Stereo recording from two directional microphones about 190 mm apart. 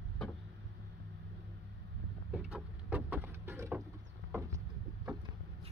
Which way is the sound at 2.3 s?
5° right (ahead or behind).